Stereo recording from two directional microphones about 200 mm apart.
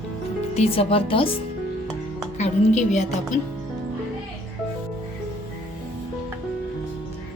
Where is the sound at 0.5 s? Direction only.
30° left (ahead or behind).